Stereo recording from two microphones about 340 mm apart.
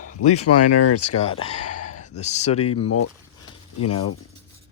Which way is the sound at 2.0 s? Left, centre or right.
Centre.